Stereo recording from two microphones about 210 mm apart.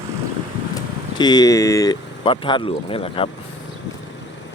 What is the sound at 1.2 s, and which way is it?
Speech, 20° left (ahead or behind).